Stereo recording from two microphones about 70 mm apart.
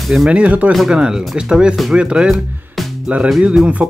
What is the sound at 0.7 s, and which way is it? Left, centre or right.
Speech, centre.